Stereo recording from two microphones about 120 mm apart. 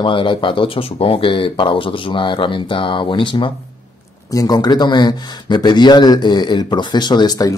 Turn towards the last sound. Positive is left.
turn(degrees=35)  # may be behind; listen again after turning